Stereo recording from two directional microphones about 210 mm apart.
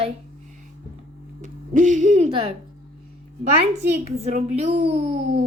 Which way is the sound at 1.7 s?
35° right (ahead or behind).